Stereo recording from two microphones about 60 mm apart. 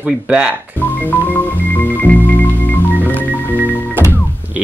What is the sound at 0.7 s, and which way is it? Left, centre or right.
Music, left.